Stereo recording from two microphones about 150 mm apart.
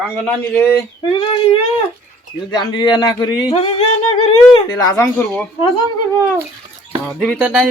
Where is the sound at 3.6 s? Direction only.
40° left (ahead or behind).